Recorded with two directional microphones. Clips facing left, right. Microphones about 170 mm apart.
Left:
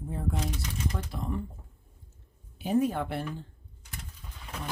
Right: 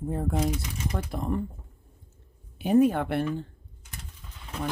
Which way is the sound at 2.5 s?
65° right (ahead or behind).